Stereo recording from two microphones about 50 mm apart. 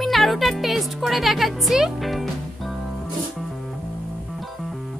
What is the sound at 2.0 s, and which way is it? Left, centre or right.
Music, centre.